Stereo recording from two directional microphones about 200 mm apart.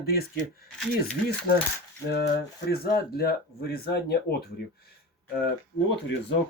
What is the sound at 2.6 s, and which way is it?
Speech, 50° left (ahead or behind).